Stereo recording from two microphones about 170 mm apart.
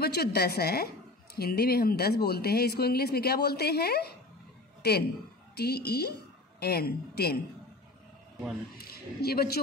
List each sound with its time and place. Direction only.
0.0 s a woman's voice: 65° left (ahead or behind)
8.7 s a man's voice: 65° left (ahead or behind)